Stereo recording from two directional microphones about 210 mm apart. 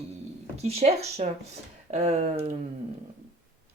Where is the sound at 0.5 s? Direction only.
30° right (ahead or behind).